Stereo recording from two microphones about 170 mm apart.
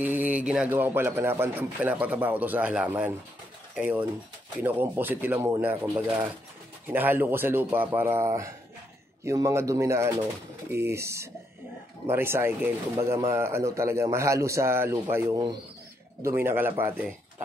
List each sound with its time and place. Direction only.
0.0 s a man's voice: 10° right (ahead or behind)